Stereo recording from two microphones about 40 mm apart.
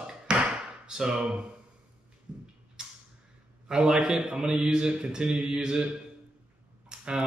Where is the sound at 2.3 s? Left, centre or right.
Right.